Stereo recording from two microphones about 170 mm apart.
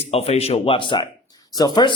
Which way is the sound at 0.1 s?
35° left (ahead or behind).